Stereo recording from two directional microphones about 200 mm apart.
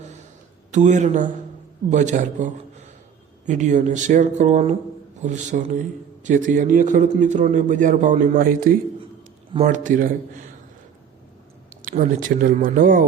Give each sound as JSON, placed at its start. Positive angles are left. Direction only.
{"t": 0.7, "sound": "a man's voice", "side_deg": -35}
{"t": 9.5, "sound": "a man's voice", "side_deg": -35}
{"t": 11.7, "sound": "speech", "side_deg": -40}